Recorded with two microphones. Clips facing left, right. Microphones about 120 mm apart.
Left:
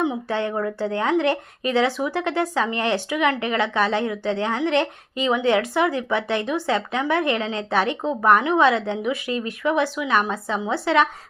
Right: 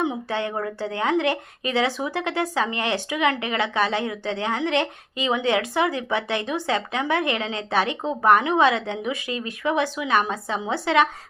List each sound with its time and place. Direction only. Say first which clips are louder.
0.0 s a woman's voice: left 2 dB; 20° right (ahead or behind)